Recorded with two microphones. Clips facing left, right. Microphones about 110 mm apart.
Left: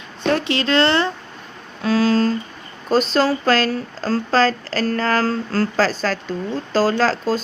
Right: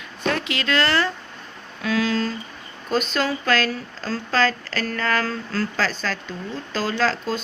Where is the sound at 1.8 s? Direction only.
35° left (ahead or behind).